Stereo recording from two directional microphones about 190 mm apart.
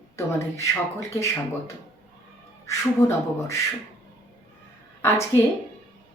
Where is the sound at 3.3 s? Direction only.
15° left (ahead or behind).